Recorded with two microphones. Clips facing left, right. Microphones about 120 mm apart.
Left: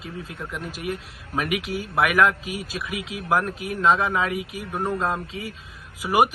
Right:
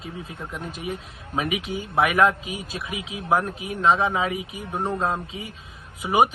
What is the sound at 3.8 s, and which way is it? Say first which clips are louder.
Speech: even; 30° right (ahead or behind).